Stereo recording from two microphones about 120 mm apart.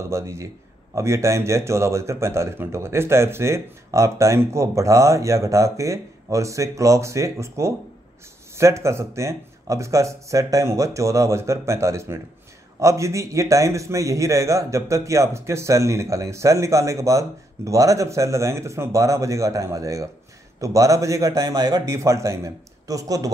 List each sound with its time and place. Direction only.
0.1 s a man's voice: 25° right (ahead or behind)